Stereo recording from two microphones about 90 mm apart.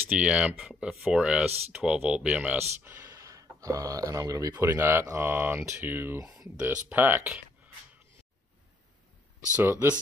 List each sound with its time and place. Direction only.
0.2 s speech: 15° right (ahead or behind)
3.1 s speech: 40° right (ahead or behind)
9.6 s speech: 25° right (ahead or behind)